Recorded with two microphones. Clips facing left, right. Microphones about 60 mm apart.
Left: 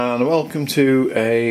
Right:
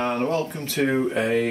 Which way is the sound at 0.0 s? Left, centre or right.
Left.